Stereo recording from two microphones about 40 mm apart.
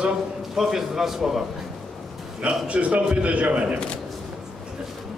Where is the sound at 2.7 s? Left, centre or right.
Right.